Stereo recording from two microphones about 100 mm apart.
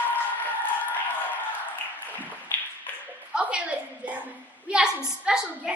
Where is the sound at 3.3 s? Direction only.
10° right (ahead or behind).